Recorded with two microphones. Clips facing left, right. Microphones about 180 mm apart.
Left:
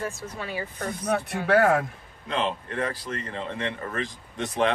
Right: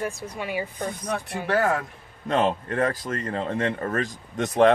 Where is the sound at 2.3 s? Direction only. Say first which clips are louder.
Right 5 dB; 45° right (ahead or behind).